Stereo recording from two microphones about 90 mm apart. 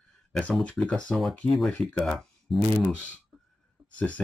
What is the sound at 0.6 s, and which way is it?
Speech, 10° left (ahead or behind).